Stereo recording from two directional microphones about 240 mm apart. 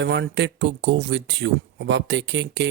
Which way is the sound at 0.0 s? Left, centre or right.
Right.